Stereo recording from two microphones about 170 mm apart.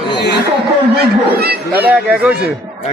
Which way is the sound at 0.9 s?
70° right (ahead or behind).